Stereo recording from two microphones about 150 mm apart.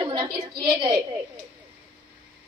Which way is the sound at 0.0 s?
30° right (ahead or behind).